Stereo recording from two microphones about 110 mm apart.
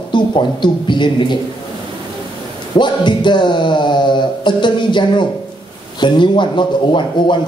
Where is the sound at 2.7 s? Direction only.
45° left (ahead or behind).